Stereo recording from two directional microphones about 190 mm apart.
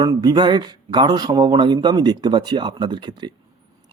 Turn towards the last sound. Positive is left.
turn(degrees=-25)  # may be behind; listen again after turning